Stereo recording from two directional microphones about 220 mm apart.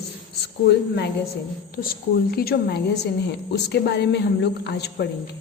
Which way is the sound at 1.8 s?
45° left (ahead or behind).